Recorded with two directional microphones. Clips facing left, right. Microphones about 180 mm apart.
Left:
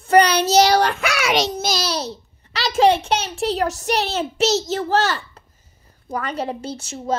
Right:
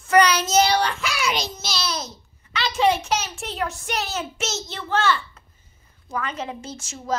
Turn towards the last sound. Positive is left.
turn(degrees=30)  # may be behind; listen again after turning